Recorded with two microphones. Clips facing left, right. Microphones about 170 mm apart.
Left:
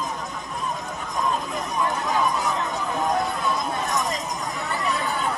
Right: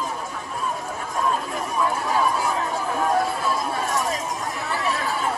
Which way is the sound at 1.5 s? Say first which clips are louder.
Right 1 dB; 10° right (ahead or behind).